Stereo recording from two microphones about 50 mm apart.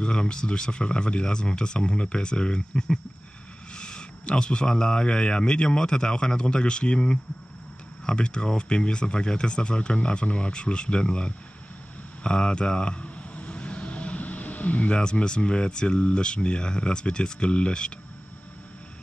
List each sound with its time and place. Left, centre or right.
0.0 s a man's voice: centre